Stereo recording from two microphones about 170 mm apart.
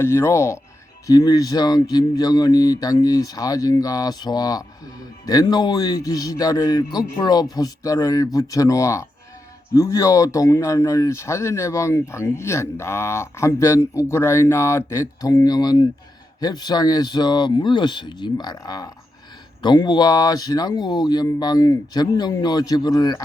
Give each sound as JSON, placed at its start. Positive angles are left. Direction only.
{"t": 0.0, "sound": "speech", "side_deg": 15}